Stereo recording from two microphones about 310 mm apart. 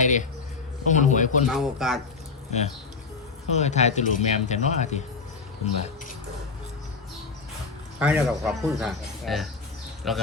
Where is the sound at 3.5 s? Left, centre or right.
Left.